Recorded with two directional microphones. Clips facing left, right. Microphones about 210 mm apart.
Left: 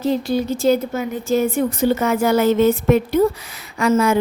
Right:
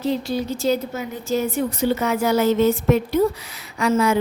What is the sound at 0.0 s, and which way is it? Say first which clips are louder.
A woman's voice: left 3 dB; 50° left (ahead or behind).